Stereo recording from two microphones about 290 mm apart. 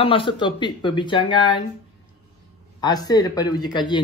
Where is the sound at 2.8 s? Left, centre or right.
Centre.